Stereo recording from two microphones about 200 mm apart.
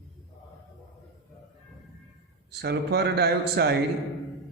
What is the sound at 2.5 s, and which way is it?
A man's voice, 55° right (ahead or behind).